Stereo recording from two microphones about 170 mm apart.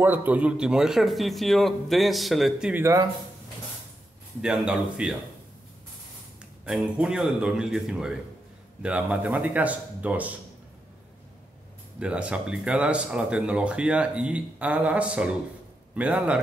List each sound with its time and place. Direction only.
0.0 s a man's voice: 10° right (ahead or behind)
2.8 s speech: 20° right (ahead or behind)
4.4 s a man's voice: 5° right (ahead or behind)
6.6 s a man's voice: 5° right (ahead or behind)
12.0 s a man's voice: 5° right (ahead or behind)